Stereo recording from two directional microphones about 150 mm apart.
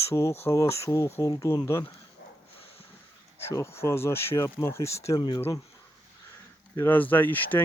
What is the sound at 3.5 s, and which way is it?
Speech, 15° left (ahead or behind).